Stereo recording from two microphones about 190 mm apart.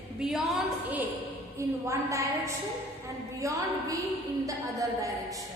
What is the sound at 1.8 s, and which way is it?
A woman's voice, 15° right (ahead or behind).